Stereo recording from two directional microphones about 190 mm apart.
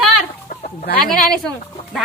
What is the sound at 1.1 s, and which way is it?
Speech, 5° left (ahead or behind).